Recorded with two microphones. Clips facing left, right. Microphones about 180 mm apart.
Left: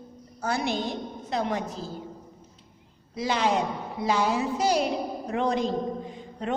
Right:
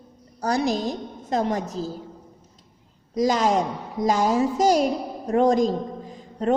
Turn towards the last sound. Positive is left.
turn(degrees=-40)  # may be behind; listen again after turning